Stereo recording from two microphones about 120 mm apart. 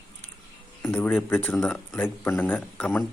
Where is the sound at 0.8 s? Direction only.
15° left (ahead or behind).